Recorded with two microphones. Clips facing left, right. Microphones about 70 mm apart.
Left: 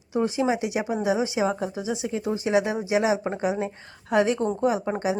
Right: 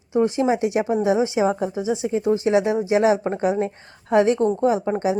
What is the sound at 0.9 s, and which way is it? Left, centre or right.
Speech, centre.